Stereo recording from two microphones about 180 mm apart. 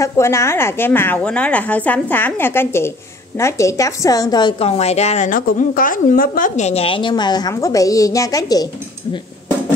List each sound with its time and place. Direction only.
0.0 s a woman's voice: 15° left (ahead or behind)